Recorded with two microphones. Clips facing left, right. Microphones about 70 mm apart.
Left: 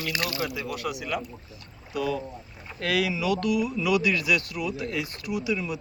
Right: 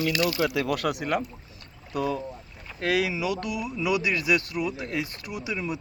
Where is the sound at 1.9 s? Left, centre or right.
Right.